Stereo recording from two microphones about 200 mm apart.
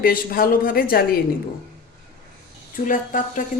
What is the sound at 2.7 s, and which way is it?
Speech, 40° left (ahead or behind).